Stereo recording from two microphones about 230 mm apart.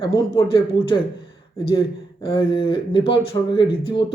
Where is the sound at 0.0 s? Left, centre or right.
Centre.